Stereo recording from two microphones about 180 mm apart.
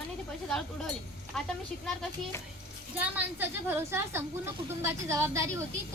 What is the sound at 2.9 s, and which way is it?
A woman's voice, 10° right (ahead or behind).